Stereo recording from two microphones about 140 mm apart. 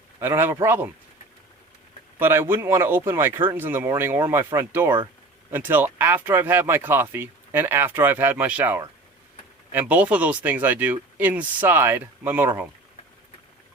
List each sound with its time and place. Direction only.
0.2 s speech: 15° right (ahead or behind)
2.1 s speech: 15° right (ahead or behind)